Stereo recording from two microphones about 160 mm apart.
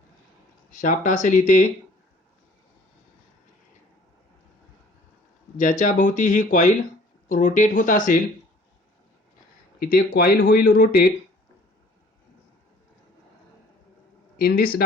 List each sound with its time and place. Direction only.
0.7 s speech: 50° left (ahead or behind)
5.5 s speech: 50° left (ahead or behind)
9.8 s speech: 70° left (ahead or behind)
14.3 s speech: 65° left (ahead or behind)